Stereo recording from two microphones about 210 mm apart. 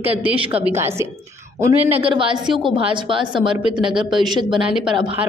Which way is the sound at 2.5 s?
25° right (ahead or behind).